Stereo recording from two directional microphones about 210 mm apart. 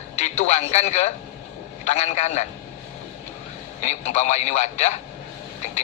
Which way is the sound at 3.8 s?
35° left (ahead or behind).